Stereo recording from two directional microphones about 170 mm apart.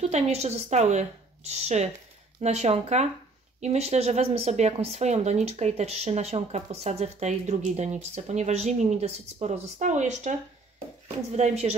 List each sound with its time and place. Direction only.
0.0 s speech: 40° right (ahead or behind)
11.3 s speech: 40° right (ahead or behind)